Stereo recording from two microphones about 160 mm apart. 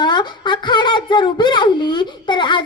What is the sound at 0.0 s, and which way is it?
A woman's voice, 30° left (ahead or behind).